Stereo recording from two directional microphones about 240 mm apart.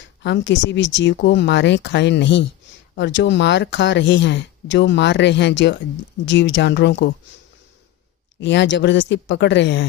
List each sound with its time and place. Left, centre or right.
0.2 s speech: left
8.4 s speech: left